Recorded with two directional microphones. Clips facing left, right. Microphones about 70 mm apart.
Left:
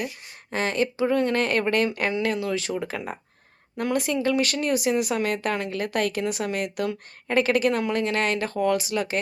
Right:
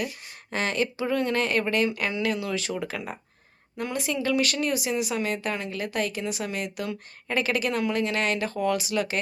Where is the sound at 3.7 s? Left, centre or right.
Left.